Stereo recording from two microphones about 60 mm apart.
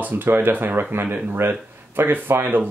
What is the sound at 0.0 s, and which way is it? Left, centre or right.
Speech, right.